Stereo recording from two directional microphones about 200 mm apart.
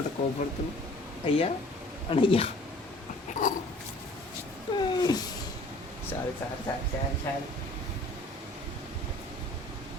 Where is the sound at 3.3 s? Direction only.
40° left (ahead or behind).